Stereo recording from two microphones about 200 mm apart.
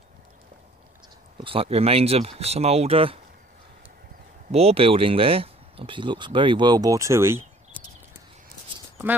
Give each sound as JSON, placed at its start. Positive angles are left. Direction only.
{"t": 1.4, "sound": "speech", "side_deg": -30}
{"t": 4.5, "sound": "speech", "side_deg": -30}